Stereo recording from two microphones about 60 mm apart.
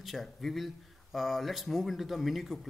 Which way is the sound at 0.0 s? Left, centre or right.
Centre.